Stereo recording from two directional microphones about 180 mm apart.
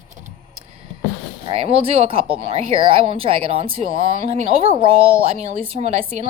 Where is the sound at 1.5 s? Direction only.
30° right (ahead or behind).